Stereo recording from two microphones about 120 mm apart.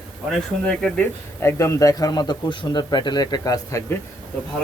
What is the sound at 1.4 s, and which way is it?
A man's voice, 20° left (ahead or behind).